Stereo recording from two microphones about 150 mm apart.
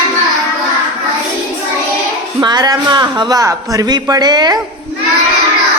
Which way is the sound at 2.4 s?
30° right (ahead or behind).